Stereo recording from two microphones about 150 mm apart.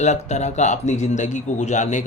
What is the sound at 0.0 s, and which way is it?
A man's voice, 50° left (ahead or behind).